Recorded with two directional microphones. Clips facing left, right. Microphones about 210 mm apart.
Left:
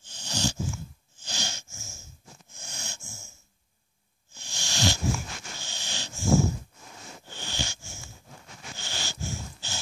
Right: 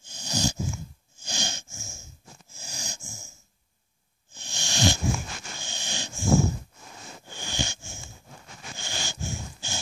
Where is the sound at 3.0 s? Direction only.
40° right (ahead or behind).